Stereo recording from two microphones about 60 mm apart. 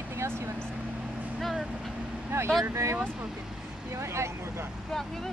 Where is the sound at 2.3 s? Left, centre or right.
Right.